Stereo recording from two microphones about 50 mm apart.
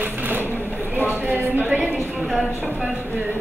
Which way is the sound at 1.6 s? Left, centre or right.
Right.